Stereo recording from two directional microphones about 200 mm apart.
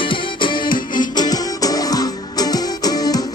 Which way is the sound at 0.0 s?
25° left (ahead or behind).